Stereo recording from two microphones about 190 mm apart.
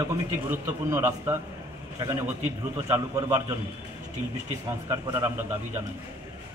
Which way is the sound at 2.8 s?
15° right (ahead or behind).